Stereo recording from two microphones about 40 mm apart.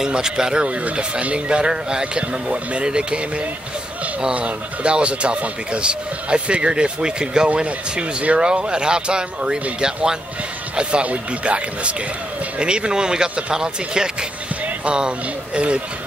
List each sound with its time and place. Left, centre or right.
0.0 s speech: centre
0.7 s speech: right